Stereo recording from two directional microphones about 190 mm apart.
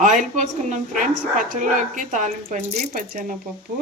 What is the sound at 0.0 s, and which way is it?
Speech, 40° right (ahead or behind).